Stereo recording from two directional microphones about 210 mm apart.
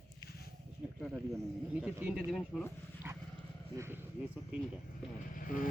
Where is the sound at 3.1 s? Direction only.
10° right (ahead or behind).